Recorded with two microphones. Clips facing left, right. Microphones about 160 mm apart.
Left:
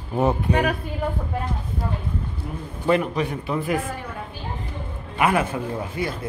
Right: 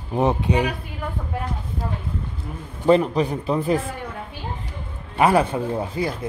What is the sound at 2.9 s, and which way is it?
Speech, 30° right (ahead or behind).